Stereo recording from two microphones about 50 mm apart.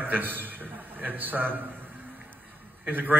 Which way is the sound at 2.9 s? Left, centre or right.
Right.